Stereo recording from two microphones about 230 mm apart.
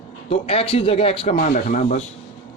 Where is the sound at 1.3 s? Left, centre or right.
Left.